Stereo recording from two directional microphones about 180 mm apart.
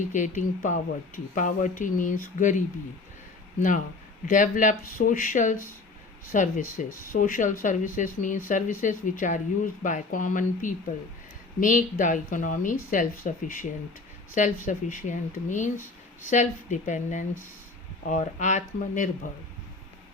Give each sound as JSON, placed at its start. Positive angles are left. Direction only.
{"t": 0.1, "sound": "speech", "side_deg": 45}
{"t": 4.3, "sound": "speech", "side_deg": 45}